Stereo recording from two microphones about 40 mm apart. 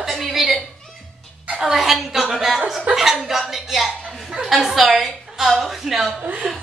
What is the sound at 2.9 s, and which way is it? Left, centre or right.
Speech, right.